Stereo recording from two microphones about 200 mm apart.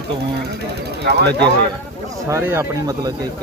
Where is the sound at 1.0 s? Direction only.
55° right (ahead or behind).